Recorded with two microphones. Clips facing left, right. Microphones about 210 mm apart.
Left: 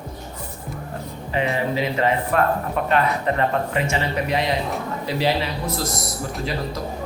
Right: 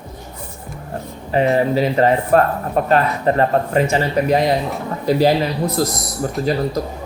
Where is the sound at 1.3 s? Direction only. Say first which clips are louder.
Right 7 dB; 40° right (ahead or behind).